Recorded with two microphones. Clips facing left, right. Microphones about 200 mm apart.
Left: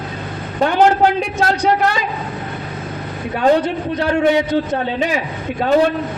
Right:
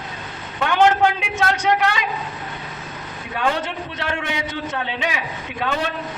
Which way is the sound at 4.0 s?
40° left (ahead or behind).